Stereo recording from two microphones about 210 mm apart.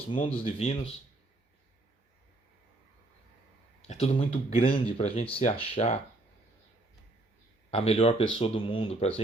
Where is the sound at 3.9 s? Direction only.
30° left (ahead or behind).